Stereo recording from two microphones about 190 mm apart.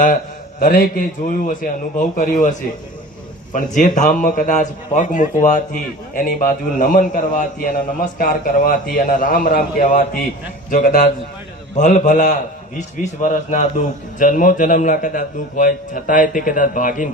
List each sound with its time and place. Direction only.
0.6 s a man's voice: 50° left (ahead or behind)